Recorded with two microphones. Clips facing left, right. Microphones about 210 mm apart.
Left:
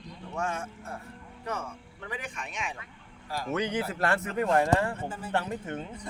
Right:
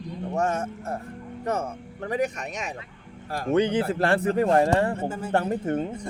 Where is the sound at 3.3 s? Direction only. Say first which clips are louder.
Right 6 dB; 55° right (ahead or behind).